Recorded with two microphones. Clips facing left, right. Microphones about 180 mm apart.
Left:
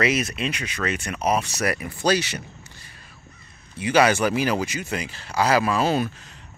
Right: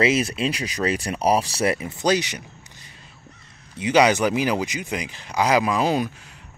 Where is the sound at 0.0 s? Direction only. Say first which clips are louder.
Right 3 dB; 30° right (ahead or behind).